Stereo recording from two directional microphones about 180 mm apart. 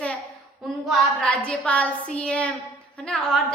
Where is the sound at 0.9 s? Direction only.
5° left (ahead or behind).